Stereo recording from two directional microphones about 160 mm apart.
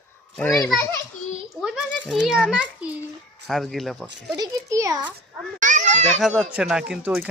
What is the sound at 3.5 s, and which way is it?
Speech, centre (ahead or behind).